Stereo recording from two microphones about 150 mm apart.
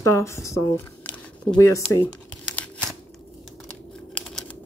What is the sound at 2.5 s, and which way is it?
Tearing, 10° left (ahead or behind).